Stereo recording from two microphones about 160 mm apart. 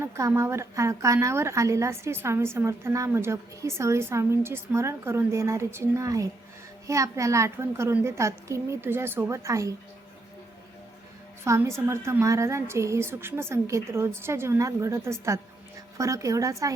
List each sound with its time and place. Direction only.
0.0 s a woman's voice: 15° right (ahead or behind)
11.4 s a woman's voice: 15° right (ahead or behind)